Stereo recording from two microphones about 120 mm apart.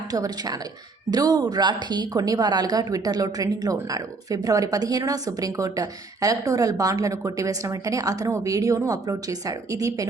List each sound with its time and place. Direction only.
0.1 s a woman's voice: 30° right (ahead or behind)